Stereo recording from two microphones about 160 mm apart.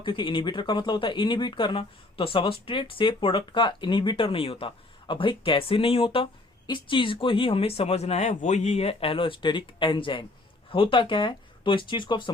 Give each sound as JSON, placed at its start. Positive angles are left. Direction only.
{"t": 0.0, "sound": "speech", "side_deg": 30}